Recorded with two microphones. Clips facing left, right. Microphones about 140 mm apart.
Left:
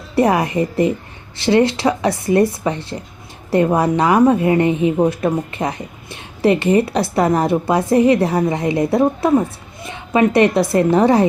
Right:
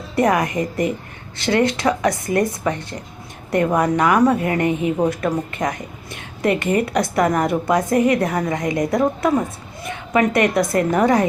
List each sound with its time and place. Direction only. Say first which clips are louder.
0.2 s a woman's voice: left 3 dB; 25° left (ahead or behind)
3.5 s a woman's voice: left 3 dB; 25° left (ahead or behind)